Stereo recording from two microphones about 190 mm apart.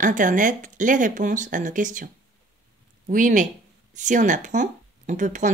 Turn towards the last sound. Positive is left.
turn(degrees=-40)  # may be behind; listen again after turning